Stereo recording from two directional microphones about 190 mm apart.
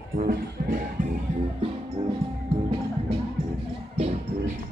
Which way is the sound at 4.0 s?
35° right (ahead or behind).